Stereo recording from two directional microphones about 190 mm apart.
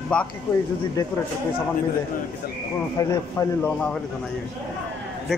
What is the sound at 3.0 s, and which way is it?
A man's voice, 15° left (ahead or behind).